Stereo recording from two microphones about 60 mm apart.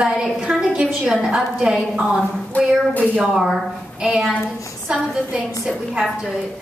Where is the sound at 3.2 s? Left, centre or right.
Centre.